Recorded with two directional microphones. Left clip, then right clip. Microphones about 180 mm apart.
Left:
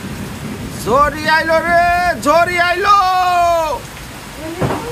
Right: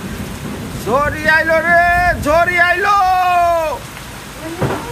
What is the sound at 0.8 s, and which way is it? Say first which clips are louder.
A man's voice: left 1 dB; 15° left (ahead or behind).